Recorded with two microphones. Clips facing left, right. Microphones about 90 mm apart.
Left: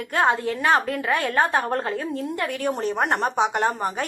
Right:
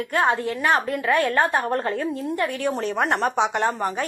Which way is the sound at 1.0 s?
25° left (ahead or behind).